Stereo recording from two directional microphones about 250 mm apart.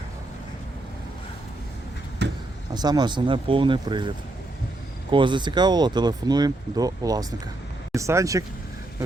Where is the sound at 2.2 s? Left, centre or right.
Right.